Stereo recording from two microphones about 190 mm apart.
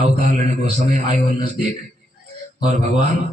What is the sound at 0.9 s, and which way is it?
Speech, 40° right (ahead or behind).